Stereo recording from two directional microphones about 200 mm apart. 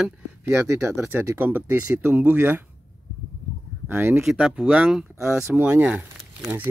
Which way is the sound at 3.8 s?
10° right (ahead or behind).